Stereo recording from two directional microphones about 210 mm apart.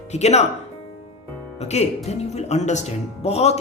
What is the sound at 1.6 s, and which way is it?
Speech, 30° left (ahead or behind).